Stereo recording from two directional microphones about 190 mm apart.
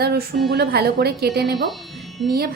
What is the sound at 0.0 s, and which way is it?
A woman's voice, 55° right (ahead or behind).